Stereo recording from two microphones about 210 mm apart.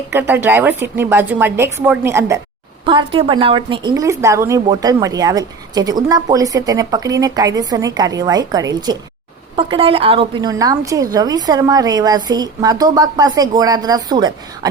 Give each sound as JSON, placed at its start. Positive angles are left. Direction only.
{"t": 0.1, "sound": "a woman's voice", "side_deg": -10}
{"t": 2.8, "sound": "a woman's voice", "side_deg": -25}